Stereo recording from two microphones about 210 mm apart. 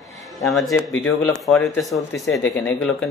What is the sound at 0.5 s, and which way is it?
Speech, centre (ahead or behind).